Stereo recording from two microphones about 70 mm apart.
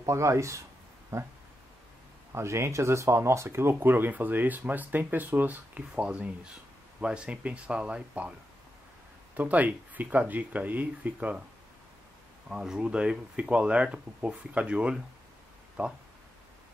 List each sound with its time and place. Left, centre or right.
0.0 s speech: right
2.3 s speech: right; by 8.4 s centre
9.4 s speech: right
12.4 s speech: centre